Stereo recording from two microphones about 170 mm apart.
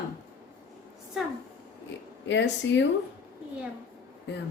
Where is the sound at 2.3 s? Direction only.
90° left.